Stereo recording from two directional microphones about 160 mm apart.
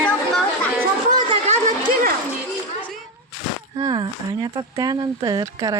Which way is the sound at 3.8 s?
25° right (ahead or behind).